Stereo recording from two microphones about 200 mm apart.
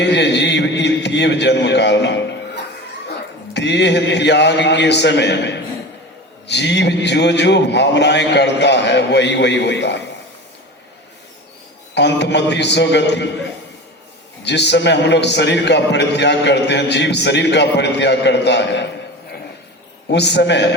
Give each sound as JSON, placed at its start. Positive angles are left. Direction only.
{"t": 0.0, "sound": "a man's voice", "side_deg": 60}
{"t": 11.9, "sound": "a man's voice", "side_deg": 60}
{"t": 14.4, "sound": "a man's voice", "side_deg": 60}
{"t": 20.1, "sound": "a man's voice", "side_deg": 60}